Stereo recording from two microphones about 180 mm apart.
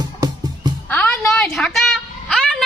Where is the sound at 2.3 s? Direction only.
Centre (ahead or behind).